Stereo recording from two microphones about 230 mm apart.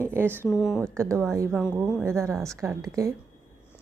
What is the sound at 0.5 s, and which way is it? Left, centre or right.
Speech, centre.